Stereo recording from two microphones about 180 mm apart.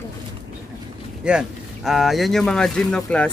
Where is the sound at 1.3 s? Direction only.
5° right (ahead or behind).